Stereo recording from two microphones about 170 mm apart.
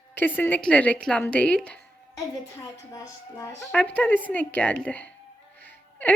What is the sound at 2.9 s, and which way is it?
Speech, 20° left (ahead or behind).